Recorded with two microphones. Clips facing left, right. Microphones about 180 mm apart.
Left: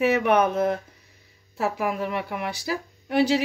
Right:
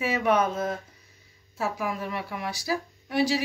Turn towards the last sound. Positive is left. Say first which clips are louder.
# left 4 dB
turn(degrees=60)  # may be behind; listen again after turning